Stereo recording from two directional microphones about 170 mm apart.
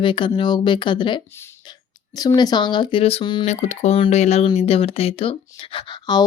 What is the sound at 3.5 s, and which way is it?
Speech, 40° left (ahead or behind).